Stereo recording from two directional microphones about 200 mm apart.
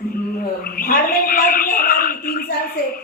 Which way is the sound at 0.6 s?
45° left (ahead or behind).